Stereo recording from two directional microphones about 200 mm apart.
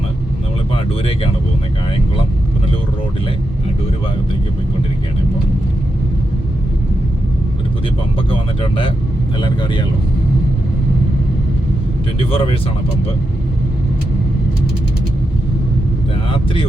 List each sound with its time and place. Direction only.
8.3 s speech: 25° left (ahead or behind)
12.2 s speech: 30° left (ahead or behind)